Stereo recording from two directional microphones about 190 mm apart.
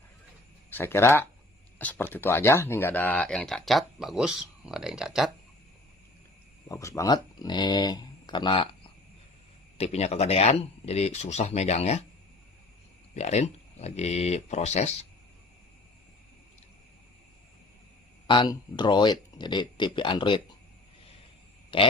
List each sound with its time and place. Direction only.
0.7 s speech: 10° left (ahead or behind)
6.7 s speech: 15° left (ahead or behind)
9.7 s speech: 35° left (ahead or behind)
13.1 s speech: 35° left (ahead or behind)
18.3 s speech: 25° left (ahead or behind)
21.7 s speech: 25° left (ahead or behind)